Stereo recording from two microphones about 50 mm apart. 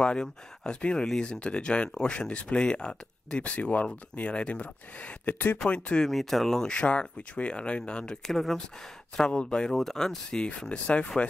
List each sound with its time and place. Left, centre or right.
0.0 s speech: centre
3.4 s speech: left
5.2 s speech: left
5.7 s speech: left
6.0 s speech: centre
6.7 s speech: left
8.3 s speech: centre
9.3 s speech: centre
9.7 s speech: centre